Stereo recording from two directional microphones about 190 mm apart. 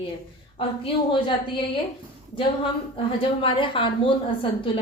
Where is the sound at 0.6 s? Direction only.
30° left (ahead or behind).